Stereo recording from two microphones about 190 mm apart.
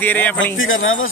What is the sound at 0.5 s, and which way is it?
Speech, 90° left.